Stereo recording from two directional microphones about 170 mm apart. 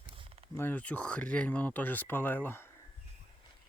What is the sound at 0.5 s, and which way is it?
Speech, 10° left (ahead or behind).